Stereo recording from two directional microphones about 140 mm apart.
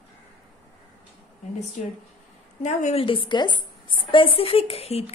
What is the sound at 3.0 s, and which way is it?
Speech, 40° left (ahead or behind).